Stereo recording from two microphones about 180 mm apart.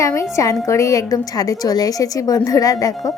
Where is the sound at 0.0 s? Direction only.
15° left (ahead or behind).